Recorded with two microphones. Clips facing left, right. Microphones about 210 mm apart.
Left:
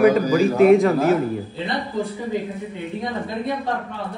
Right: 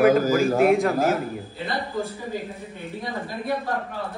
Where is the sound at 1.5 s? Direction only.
20° left (ahead or behind).